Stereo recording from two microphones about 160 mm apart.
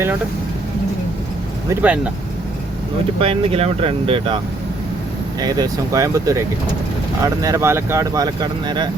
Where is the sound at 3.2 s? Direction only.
35° right (ahead or behind).